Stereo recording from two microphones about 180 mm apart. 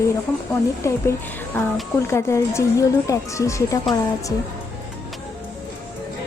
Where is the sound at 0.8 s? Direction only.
15° left (ahead or behind).